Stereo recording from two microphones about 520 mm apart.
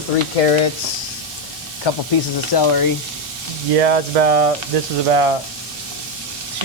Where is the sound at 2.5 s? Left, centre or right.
Left.